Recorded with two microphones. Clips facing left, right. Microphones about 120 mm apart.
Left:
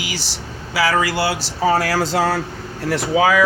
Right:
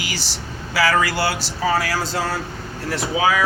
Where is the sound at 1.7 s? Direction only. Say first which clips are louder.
Left 4 dB; 70° left (ahead or behind); by 3.3 s 85° left.